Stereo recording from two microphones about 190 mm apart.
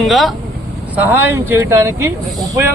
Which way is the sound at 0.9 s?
10° right (ahead or behind).